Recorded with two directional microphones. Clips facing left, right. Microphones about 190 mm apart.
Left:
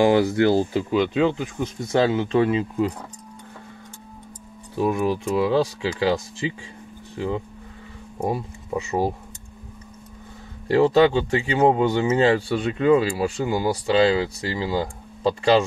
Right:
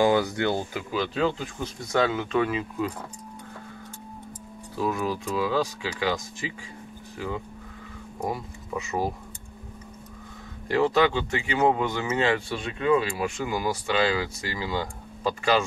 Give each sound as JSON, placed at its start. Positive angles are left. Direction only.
{"t": 0.0, "sound": "speech", "side_deg": 30}
{"t": 4.7, "sound": "speech", "side_deg": 25}
{"t": 10.7, "sound": "speech", "side_deg": 30}